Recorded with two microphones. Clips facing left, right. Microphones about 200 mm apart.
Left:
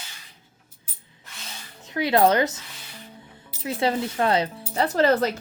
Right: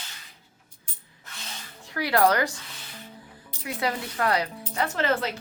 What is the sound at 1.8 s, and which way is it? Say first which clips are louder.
Speech: left 3 dB; 20° left (ahead or behind).